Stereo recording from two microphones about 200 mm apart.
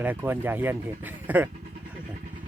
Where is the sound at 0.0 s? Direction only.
10° right (ahead or behind).